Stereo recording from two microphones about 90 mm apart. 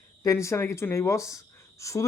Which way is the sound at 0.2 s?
35° left (ahead or behind).